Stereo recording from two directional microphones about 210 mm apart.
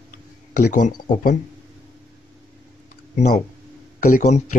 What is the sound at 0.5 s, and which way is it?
Speech, 40° left (ahead or behind).